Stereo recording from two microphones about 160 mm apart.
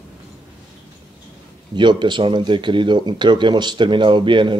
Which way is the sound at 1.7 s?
30° right (ahead or behind).